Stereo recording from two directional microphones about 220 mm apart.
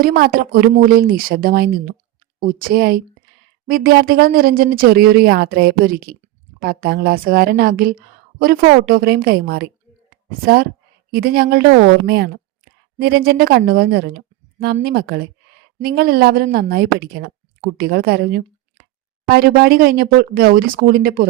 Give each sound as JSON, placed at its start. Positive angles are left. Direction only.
{"t": 0.0, "sound": "a woman's voice", "side_deg": -45}